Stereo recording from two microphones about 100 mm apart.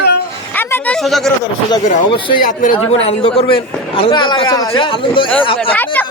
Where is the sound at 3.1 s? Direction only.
70° left (ahead or behind); by 4.7 s 40° left (ahead or behind).